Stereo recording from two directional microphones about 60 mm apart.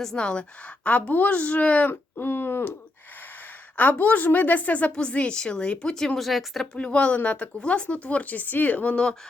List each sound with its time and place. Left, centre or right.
0.0 s a woman's voice: centre
0.9 s speech: left
1.9 s speech: left
3.8 s a woman's voice: left; by 6.7 s centre
6.7 s speech: centre